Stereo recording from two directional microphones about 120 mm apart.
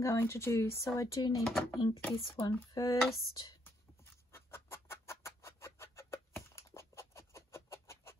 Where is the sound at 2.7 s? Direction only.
30° left (ahead or behind).